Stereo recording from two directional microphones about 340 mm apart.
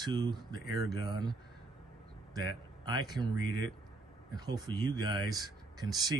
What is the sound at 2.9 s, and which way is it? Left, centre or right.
Speech, centre.